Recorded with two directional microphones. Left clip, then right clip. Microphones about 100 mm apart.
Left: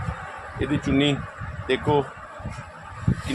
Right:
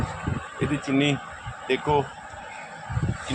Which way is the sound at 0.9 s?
15° left (ahead or behind).